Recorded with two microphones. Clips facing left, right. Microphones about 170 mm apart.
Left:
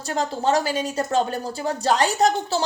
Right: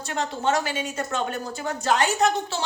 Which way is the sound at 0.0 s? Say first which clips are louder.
Left 3 dB; 35° left (ahead or behind).